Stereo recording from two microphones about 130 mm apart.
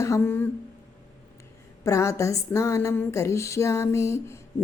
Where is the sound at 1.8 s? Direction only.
25° left (ahead or behind).